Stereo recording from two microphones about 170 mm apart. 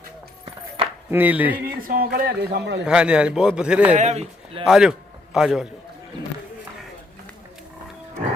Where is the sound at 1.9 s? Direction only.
60° right (ahead or behind); by 2.8 s 80° right.